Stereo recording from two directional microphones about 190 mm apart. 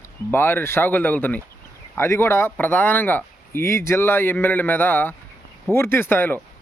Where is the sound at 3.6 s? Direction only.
50° right (ahead or behind).